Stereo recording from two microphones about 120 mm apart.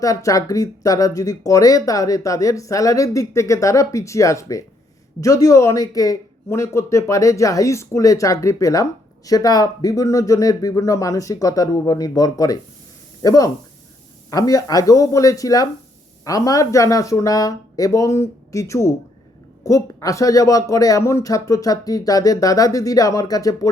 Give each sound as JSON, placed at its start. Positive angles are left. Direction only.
{"t": 0.0, "sound": "speech", "side_deg": 30}